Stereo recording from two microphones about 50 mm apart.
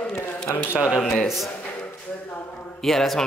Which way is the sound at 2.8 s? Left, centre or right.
Centre.